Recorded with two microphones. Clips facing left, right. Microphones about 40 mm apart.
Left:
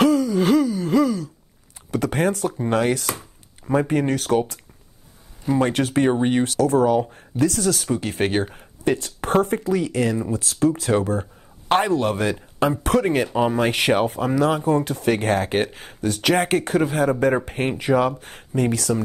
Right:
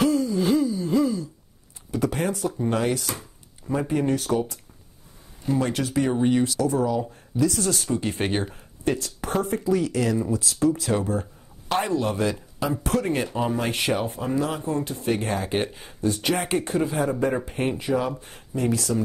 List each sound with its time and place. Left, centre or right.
0.0 s gasp: left
1.9 s speech: left
5.6 s speech: left
8.2 s speech: left
10.3 s speech: left